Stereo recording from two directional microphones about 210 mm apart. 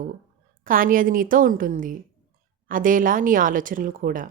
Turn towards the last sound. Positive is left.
turn(degrees=-40)  # may be behind; listen again after turning